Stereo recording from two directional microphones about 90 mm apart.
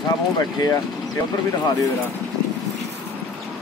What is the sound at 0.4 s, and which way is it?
Speech, 40° left (ahead or behind).